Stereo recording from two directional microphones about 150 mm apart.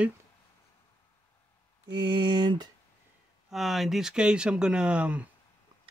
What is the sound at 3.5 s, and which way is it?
Speech, centre (ahead or behind).